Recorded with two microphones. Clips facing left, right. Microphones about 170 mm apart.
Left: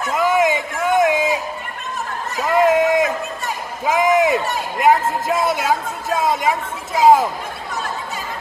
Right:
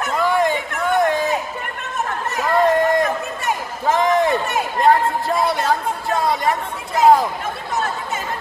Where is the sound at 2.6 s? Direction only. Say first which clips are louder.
Left 2 dB; centre (ahead or behind).